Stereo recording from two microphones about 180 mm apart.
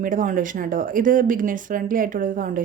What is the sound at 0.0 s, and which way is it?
Speech, 45° right (ahead or behind).